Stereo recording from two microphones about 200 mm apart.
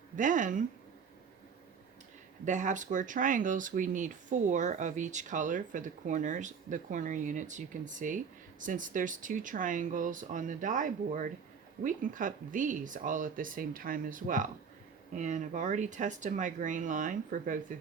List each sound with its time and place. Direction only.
0.2 s speech: 40° right (ahead or behind)
2.4 s speech: 40° right (ahead or behind)